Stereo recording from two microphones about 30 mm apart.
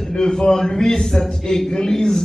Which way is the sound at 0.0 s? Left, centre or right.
Centre.